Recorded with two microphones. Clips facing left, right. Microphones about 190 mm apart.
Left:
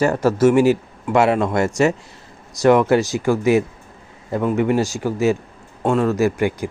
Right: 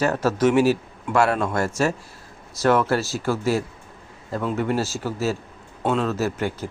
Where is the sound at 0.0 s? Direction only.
10° left (ahead or behind).